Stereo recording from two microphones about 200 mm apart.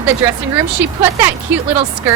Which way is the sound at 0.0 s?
15° right (ahead or behind).